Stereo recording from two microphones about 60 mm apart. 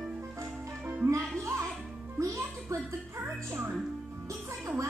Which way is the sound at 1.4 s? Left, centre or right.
Right.